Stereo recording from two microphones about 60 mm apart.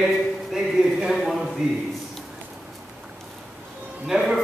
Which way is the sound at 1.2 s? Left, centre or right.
Centre.